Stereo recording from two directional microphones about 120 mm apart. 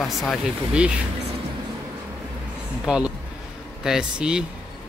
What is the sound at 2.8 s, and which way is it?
A man's voice, 10° right (ahead or behind).